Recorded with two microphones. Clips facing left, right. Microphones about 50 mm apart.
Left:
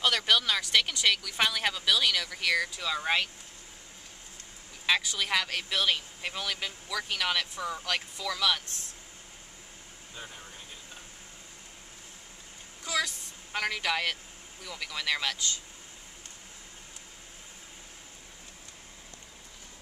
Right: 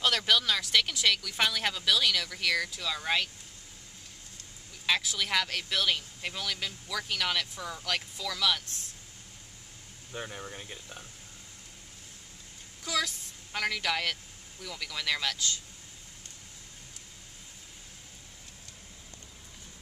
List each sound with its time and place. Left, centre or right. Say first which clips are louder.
0.0 s speech: left 1 dB; centre
4.8 s speech: left 2 dB; centre
10.1 s speech: right 6 dB; right
12.8 s a woman's voice: left 1 dB; centre